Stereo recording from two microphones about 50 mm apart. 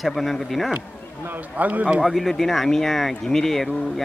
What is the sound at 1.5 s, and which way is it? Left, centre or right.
Speech, right.